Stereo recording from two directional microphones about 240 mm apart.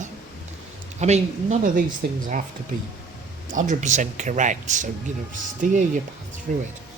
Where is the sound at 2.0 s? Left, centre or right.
Right.